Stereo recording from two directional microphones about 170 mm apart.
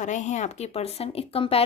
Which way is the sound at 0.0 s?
45° left (ahead or behind).